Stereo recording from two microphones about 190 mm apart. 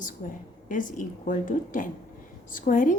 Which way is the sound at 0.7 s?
45° left (ahead or behind).